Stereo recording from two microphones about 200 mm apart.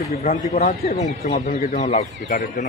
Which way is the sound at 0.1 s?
45° left (ahead or behind).